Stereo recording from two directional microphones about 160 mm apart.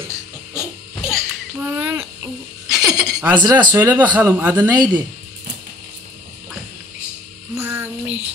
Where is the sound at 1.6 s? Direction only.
10° right (ahead or behind).